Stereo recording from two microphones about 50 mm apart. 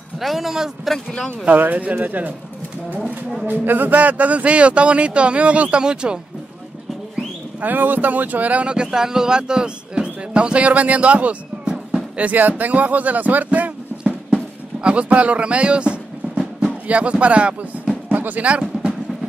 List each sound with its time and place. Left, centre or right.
0.2 s a man's voice: centre
0.8 s speech: centre
1.4 s speech: right
3.4 s speech: right; by 6.1 s centre
7.6 s speech: right
18.0 s music: right
18.4 s music: right